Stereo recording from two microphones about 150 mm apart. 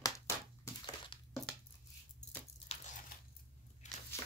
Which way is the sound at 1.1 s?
35° left (ahead or behind).